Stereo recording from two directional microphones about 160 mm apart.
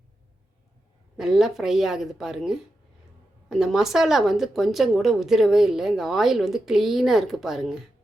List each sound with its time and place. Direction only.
1.1 s speech: centre (ahead or behind)